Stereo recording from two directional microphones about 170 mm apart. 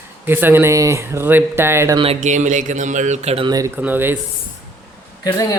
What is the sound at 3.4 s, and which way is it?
Speech, 20° right (ahead or behind).